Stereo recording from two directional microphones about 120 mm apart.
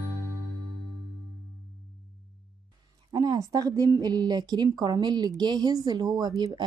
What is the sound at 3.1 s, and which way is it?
A woman's voice, 35° right (ahead or behind).